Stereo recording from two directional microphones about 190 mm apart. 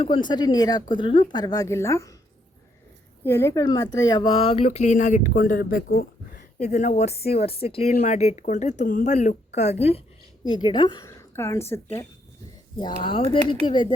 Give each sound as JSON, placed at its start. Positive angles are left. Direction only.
{"t": 0.0, "sound": "speech", "side_deg": 25}
{"t": 3.2, "sound": "speech", "side_deg": 15}
{"t": 12.7, "sound": "speech", "side_deg": 25}